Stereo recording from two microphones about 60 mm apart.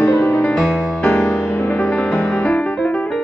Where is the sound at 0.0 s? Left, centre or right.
Left.